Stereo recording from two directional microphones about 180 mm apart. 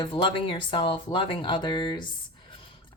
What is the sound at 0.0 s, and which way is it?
Speech, 30° left (ahead or behind).